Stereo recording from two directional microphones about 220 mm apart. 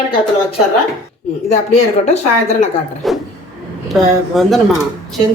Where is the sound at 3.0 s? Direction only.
Centre (ahead or behind).